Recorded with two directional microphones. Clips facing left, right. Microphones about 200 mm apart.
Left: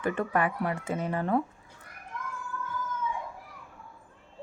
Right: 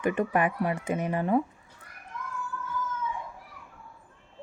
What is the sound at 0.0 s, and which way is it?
Speech, 15° right (ahead or behind).